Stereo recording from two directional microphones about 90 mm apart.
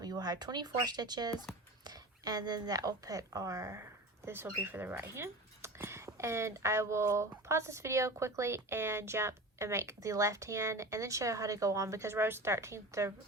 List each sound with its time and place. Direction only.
0.0 s speech: 45° right (ahead or behind)